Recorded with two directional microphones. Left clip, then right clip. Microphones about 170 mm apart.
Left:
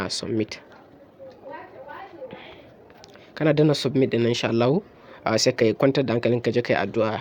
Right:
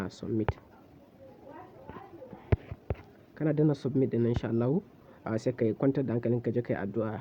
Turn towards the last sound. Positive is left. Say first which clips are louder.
# left 11 dB
turn(degrees=15)  # may be behind; listen again after turning